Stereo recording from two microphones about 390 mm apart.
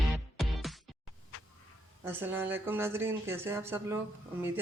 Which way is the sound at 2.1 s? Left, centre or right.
Centre.